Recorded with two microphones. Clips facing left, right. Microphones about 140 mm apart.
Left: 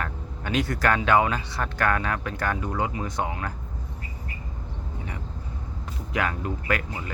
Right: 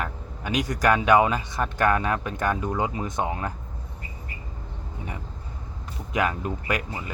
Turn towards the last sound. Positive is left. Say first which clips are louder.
# even
turn(degrees=-20)  # may be behind; listen again after turning